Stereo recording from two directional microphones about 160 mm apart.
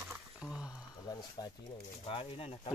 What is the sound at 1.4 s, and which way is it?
Speech, 25° left (ahead or behind).